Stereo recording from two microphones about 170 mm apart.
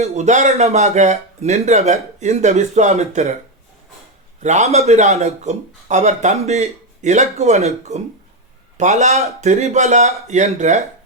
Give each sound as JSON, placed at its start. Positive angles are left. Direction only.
{"t": 0.0, "sound": "speech", "side_deg": -40}
{"t": 4.4, "sound": "speech", "side_deg": -40}